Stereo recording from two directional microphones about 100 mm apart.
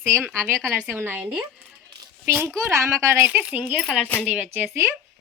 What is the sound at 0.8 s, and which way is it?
A child's voice, 20° right (ahead or behind).